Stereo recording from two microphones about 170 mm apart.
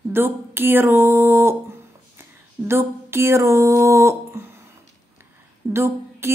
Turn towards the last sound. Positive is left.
turn(degrees=-15)  # may be behind; listen again after turning